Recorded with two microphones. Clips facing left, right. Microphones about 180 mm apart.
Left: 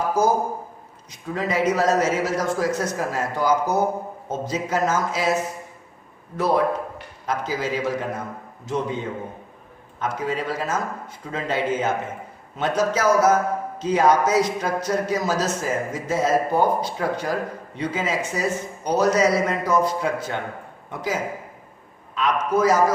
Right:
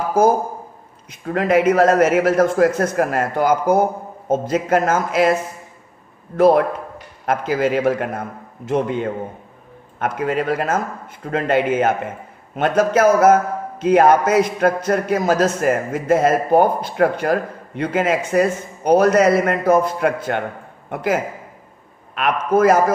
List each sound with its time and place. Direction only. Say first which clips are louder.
0.2 s a man's voice: right 7 dB; 55° right (ahead or behind)